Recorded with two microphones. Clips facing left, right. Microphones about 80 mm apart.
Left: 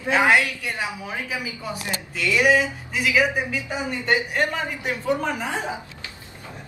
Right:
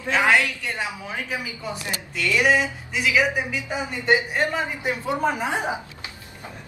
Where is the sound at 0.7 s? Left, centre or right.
Centre.